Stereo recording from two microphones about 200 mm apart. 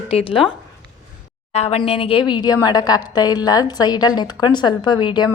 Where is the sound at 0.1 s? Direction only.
30° left (ahead or behind).